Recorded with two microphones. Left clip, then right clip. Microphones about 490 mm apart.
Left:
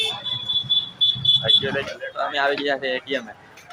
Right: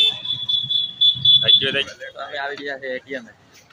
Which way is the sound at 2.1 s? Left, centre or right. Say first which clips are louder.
Left 7 dB; right.